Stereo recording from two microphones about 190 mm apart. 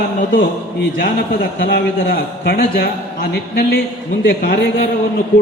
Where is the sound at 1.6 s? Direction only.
55° left (ahead or behind).